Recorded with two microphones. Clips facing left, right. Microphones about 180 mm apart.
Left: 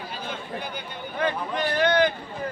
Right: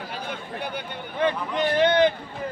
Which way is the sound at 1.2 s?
25° right (ahead or behind).